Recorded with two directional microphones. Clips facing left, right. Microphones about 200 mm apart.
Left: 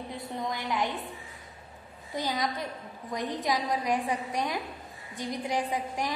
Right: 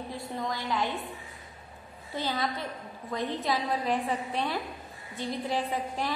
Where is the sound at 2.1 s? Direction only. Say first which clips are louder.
Even; 15° left (ahead or behind).